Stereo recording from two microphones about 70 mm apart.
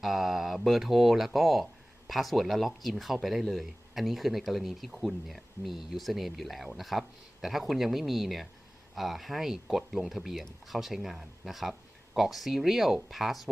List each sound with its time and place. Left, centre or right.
0.0 s speech: centre